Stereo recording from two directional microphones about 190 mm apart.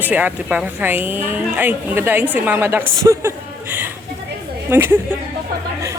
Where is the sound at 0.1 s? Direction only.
10° right (ahead or behind).